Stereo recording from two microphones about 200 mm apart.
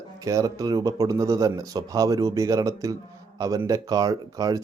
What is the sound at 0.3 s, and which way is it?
A man's voice, 15° right (ahead or behind).